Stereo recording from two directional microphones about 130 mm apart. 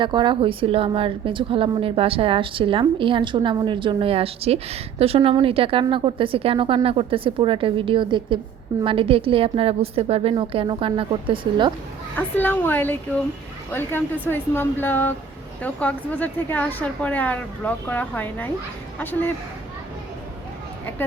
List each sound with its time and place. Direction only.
0.0 s a woman's voice: 35° right (ahead or behind)
12.1 s speech: 15° left (ahead or behind)